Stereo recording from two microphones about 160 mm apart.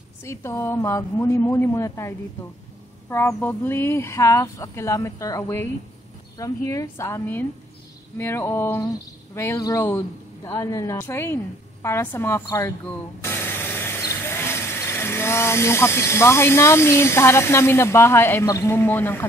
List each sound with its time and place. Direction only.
0.2 s a woman's voice: 15° left (ahead or behind)